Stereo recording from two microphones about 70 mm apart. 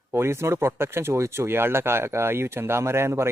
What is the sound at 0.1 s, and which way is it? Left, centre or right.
Speech, right.